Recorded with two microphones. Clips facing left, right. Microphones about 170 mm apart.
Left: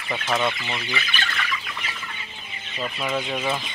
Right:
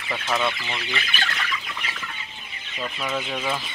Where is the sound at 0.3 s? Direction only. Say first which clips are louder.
Left 1 dB; 10° left (ahead or behind).